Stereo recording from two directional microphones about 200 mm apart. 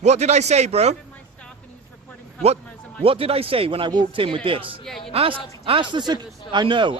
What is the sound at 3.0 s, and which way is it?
Speech, 30° right (ahead or behind).